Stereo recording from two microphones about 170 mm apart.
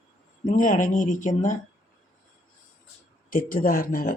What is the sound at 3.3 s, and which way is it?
Speech, 55° left (ahead or behind).